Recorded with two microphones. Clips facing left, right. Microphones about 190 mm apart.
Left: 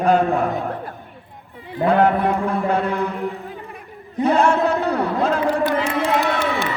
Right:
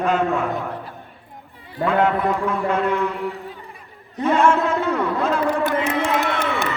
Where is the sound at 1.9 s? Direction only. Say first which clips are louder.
Left 3 dB; 35° left (ahead or behind).